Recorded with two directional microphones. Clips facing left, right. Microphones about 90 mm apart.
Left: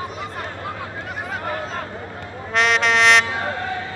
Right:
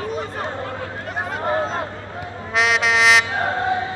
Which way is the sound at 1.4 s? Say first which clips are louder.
Right 7 dB; 30° right (ahead or behind).